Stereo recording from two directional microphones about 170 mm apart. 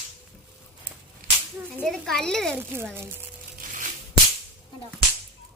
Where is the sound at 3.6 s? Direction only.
55° right (ahead or behind).